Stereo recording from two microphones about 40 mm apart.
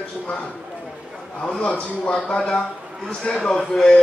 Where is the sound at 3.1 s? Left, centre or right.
Centre.